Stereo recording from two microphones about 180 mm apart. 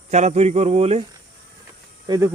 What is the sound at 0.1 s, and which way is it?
Cricket, 40° right (ahead or behind).